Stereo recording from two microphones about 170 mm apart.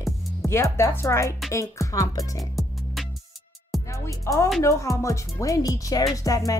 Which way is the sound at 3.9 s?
20° left (ahead or behind).